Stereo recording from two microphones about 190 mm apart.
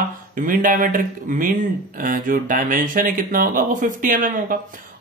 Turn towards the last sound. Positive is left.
turn(degrees=-45)  # may be behind; listen again after turning